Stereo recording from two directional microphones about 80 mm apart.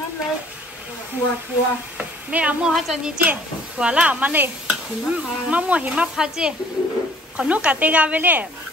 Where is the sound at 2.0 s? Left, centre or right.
Centre.